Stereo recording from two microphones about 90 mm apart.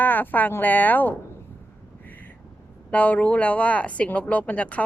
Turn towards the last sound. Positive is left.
turn(degrees=15)  # may be behind; listen again after turning